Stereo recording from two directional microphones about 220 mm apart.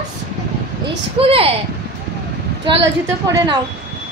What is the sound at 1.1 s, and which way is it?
Speech, 25° right (ahead or behind).